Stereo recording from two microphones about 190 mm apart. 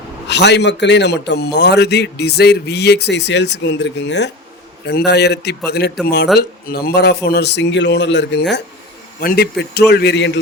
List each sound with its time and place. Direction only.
0.3 s a man's voice: 65° left (ahead or behind)